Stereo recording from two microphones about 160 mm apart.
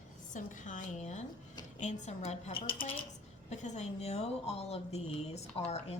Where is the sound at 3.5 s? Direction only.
45° left (ahead or behind).